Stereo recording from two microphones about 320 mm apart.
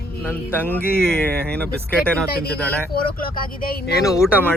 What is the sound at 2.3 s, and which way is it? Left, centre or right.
Speech, left.